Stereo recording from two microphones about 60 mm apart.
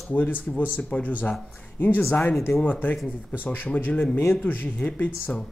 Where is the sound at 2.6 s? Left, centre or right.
Left.